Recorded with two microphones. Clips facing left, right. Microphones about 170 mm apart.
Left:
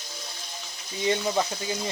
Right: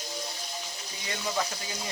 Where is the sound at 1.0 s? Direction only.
25° left (ahead or behind).